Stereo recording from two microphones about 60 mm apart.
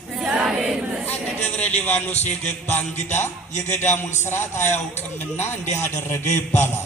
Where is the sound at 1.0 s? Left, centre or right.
Left.